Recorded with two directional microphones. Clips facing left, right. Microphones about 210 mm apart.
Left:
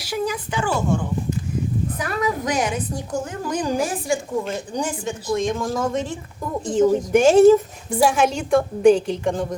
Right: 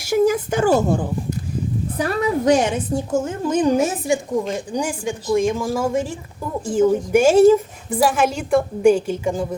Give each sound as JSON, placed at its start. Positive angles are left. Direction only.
{"t": 0.0, "sound": "a woman's voice", "side_deg": -45}